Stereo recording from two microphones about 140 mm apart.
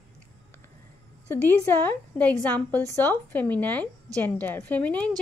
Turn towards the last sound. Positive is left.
turn(degrees=10)  # may be behind; listen again after turning